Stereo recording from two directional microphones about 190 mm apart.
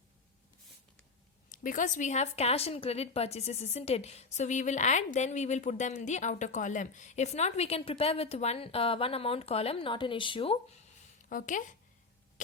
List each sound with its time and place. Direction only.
1.5 s speech: 45° left (ahead or behind); by 10.6 s 30° left (ahead or behind)
11.3 s speech: 45° left (ahead or behind)